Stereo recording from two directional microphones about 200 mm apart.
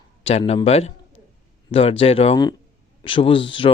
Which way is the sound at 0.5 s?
30° left (ahead or behind).